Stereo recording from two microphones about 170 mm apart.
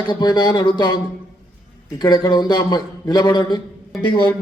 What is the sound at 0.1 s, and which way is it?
A man's voice, 25° left (ahead or behind).